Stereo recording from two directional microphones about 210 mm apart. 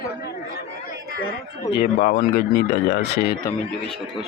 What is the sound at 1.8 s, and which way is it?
Speech, 40° left (ahead or behind).